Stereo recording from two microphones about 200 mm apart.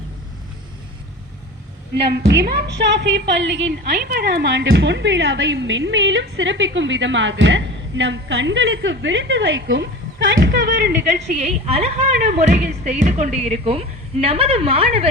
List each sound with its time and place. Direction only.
2.0 s a woman's voice: 55° right (ahead or behind)
11.3 s speech: 35° right (ahead or behind)